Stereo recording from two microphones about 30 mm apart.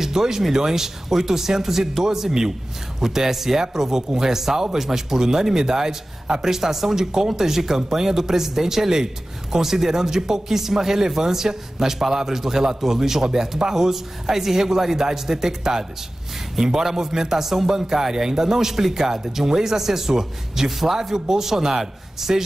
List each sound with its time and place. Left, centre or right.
0.0 s a man's voice: centre